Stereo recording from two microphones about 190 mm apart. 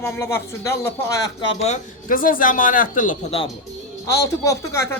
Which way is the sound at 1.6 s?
40° left (ahead or behind).